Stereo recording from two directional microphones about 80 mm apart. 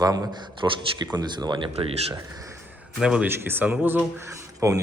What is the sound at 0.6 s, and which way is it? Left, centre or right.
Speech, right.